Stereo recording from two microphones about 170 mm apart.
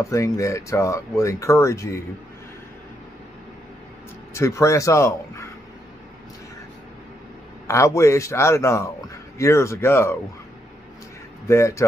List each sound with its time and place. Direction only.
0.0 s speech: 20° left (ahead or behind)
4.3 s speech: 15° left (ahead or behind)
7.6 s speech: 15° left (ahead or behind)
11.4 s speech: 15° left (ahead or behind)